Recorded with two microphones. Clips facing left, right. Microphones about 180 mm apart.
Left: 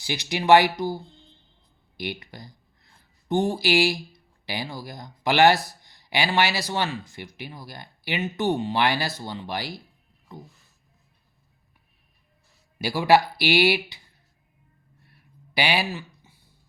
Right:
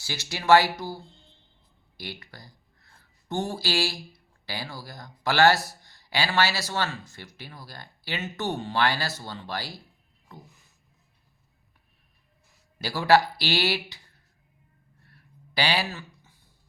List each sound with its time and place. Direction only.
0.0 s speech: 15° left (ahead or behind)
12.8 s speech: 15° left (ahead or behind)
15.0 s a sound: 15° left (ahead or behind)